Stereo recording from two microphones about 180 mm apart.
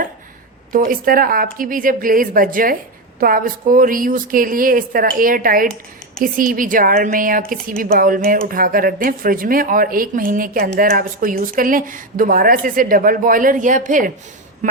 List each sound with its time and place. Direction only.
0.7 s speech: 50° right (ahead or behind)